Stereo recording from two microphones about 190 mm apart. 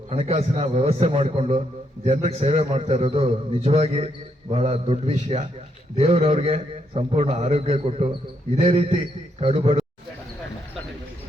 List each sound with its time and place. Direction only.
0.1 s a man's voice: 30° right (ahead or behind)